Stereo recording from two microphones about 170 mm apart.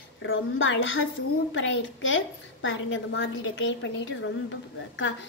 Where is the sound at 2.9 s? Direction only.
90° left.